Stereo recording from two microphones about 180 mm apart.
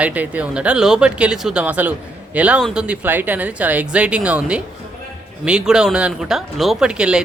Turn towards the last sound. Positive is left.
turn(degrees=-5)  # may be behind; listen again after turning